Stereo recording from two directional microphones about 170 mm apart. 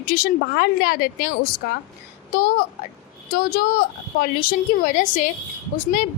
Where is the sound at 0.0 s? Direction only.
60° left (ahead or behind).